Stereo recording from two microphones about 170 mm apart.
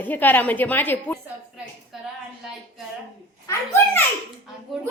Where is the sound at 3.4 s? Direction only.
15° left (ahead or behind).